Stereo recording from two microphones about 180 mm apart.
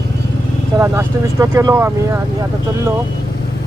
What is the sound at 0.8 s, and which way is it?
Speech, 15° right (ahead or behind).